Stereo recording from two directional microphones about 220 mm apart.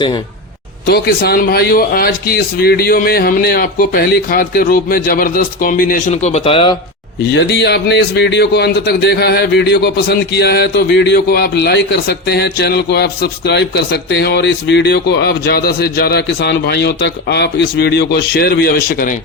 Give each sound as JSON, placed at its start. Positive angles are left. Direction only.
{"t": 0.9, "sound": "a man's voice", "side_deg": 45}
{"t": 7.3, "sound": "a man's voice", "side_deg": 50}